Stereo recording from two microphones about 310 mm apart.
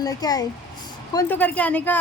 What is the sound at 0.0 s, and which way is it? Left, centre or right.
A woman's voice, centre.